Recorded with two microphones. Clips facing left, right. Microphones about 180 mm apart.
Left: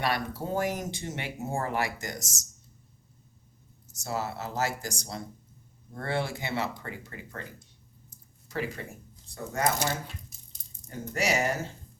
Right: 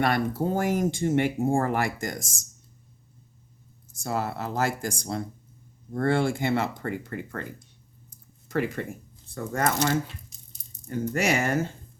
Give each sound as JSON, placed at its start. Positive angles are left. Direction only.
{"t": 0.0, "sound": "speech", "side_deg": -50}
{"t": 3.9, "sound": "speech", "side_deg": -55}
{"t": 8.4, "sound": "speech", "side_deg": -55}
{"t": 10.8, "sound": "speech", "side_deg": -55}